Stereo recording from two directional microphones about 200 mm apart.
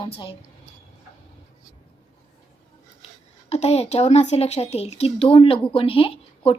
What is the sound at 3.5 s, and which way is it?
A woman's voice, 35° left (ahead or behind).